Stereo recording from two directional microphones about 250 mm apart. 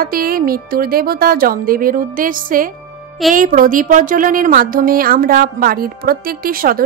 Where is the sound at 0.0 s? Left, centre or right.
Right.